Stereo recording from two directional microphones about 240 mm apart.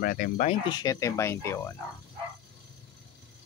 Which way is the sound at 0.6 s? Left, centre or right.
Centre.